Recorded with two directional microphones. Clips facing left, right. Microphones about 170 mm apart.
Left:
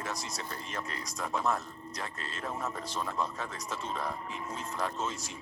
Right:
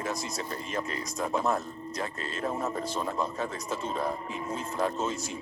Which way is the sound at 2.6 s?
30° right (ahead or behind).